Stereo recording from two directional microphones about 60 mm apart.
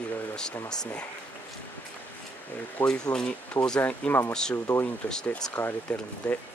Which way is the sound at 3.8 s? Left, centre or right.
Left.